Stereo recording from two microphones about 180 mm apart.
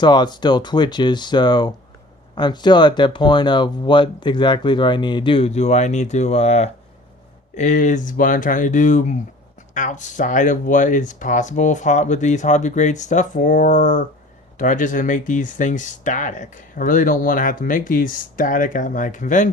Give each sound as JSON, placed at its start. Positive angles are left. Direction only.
{"t": 0.0, "sound": "speech", "side_deg": 25}